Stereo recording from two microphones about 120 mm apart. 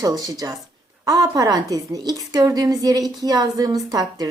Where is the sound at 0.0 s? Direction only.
30° right (ahead or behind).